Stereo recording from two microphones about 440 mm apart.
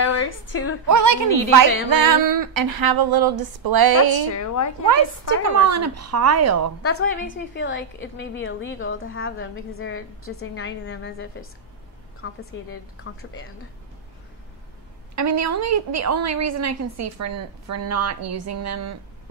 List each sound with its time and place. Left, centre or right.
0.0 s a woman's voice: left
0.8 s a woman's voice: right
1.9 s a sound: right
4.8 s a woman's voice: right
6.8 s a woman's voice: left
15.1 s a woman's voice: right